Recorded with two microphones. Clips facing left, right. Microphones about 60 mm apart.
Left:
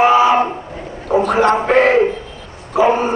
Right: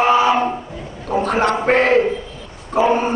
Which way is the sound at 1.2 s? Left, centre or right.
Left.